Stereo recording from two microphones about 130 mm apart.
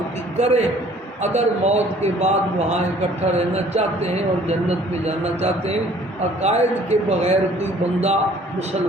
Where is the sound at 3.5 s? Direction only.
55° right (ahead or behind).